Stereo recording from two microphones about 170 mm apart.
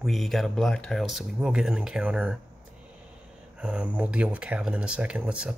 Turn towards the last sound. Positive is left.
turn(degrees=-5)  # may be behind; listen again after turning